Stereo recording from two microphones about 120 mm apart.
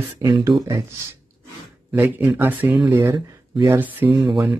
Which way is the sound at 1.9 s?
15° right (ahead or behind).